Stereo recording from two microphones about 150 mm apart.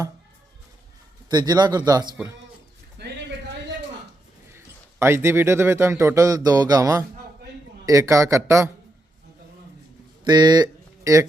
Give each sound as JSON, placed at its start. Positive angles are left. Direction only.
{"t": 1.3, "sound": "speech", "side_deg": -25}
{"t": 4.5, "sound": "a man's voice", "side_deg": -15}
{"t": 10.2, "sound": "speech", "side_deg": -30}